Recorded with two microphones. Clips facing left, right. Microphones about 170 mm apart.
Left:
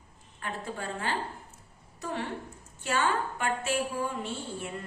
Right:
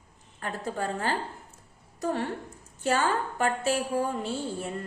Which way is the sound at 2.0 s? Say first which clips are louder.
Right 5 dB; 45° right (ahead or behind).